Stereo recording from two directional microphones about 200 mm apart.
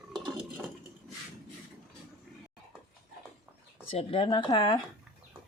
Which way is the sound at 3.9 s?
25° left (ahead or behind).